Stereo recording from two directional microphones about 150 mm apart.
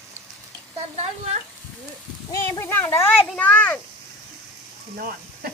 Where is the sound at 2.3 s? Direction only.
20° left (ahead or behind).